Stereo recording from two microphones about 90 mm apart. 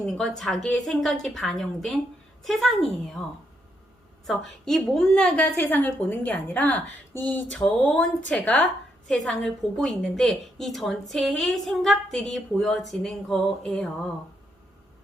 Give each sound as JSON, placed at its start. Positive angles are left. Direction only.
{"t": 0.0, "sound": "a woman's voice", "side_deg": 5}
{"t": 4.3, "sound": "a woman's voice", "side_deg": 5}